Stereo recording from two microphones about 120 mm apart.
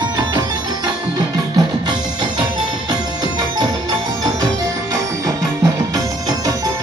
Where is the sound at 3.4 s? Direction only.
30° right (ahead or behind).